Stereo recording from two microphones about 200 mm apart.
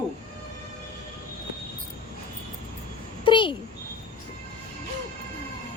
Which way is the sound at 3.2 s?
25° left (ahead or behind).